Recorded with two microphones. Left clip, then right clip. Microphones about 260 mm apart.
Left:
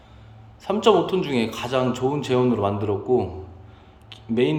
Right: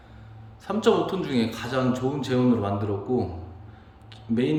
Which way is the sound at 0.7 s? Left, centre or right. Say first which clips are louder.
Left 4 dB; centre.